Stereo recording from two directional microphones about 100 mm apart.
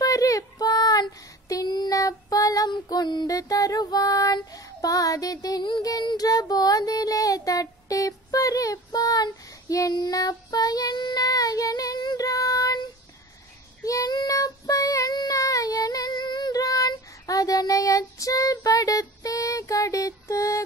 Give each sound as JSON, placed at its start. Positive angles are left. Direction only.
{"t": 0.0, "sound": "child singing", "side_deg": 35}
{"t": 13.8, "sound": "child singing", "side_deg": 35}